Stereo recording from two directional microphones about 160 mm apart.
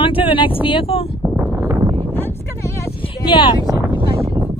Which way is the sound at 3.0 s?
30° left (ahead or behind).